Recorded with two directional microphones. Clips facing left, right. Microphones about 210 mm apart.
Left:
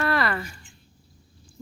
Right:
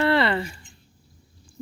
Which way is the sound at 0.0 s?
25° right (ahead or behind).